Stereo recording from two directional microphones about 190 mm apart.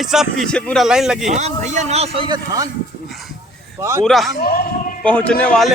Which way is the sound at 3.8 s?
15° right (ahead or behind).